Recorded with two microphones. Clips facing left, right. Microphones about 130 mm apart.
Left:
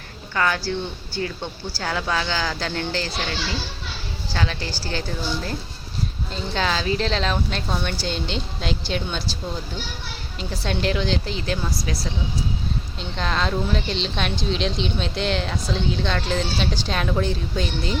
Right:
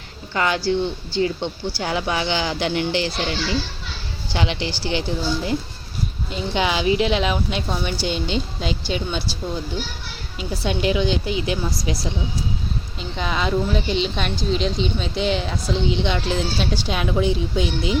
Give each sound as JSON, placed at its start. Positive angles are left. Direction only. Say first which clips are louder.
{"t": 0.3, "sound": "speech", "louder": "right 3 dB", "side_deg": -20}
{"t": 4.3, "sound": "a woman's voice", "louder": "right 3 dB", "side_deg": -20}
{"t": 10.3, "sound": "a woman's voice", "louder": "right 3 dB", "side_deg": -5}
{"t": 13.0, "sound": "a woman's voice", "louder": "right 1 dB", "side_deg": -5}